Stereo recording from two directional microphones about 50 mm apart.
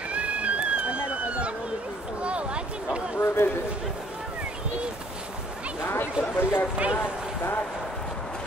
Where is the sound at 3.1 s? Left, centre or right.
Left.